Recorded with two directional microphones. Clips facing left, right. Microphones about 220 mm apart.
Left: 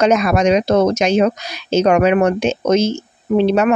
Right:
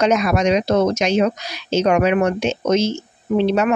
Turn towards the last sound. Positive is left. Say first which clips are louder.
# left 3 dB
turn(degrees=50)  # may be behind; listen again after turning